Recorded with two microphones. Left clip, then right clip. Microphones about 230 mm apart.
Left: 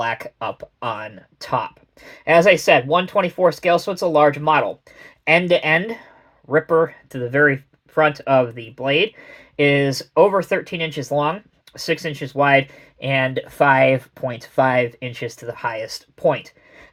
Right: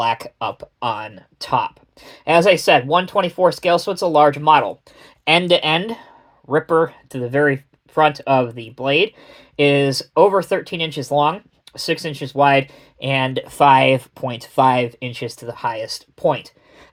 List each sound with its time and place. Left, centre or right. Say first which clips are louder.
0.2 s speech: right 2 dB; right